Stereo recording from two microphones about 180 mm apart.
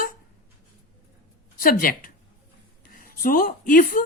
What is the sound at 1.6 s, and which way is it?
Speech, 50° left (ahead or behind).